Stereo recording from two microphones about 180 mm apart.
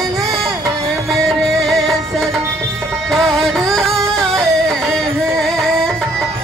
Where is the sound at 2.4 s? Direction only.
15° right (ahead or behind).